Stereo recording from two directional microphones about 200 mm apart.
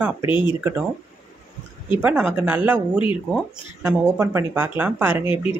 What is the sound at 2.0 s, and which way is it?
Speech, 10° right (ahead or behind).